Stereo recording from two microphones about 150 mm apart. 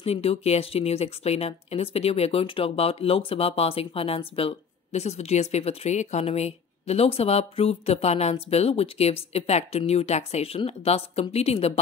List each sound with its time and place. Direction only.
0.0 s speech: 40° left (ahead or behind)